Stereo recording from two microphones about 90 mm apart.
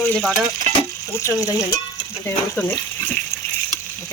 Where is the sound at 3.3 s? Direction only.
30° left (ahead or behind).